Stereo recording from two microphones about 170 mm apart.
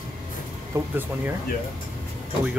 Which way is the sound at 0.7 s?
10° right (ahead or behind).